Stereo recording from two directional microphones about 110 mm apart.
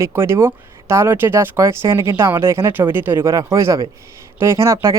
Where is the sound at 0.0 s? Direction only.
25° right (ahead or behind).